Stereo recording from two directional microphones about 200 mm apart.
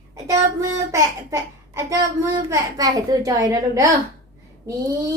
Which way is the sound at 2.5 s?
20° right (ahead or behind).